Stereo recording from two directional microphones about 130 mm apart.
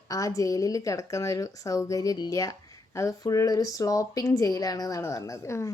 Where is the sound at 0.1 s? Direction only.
25° left (ahead or behind).